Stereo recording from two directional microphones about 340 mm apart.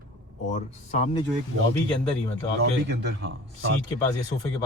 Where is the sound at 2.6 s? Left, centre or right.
Right.